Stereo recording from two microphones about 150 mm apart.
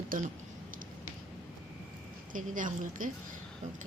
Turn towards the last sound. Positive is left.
turn(degrees=-60)  # may be behind; listen again after turning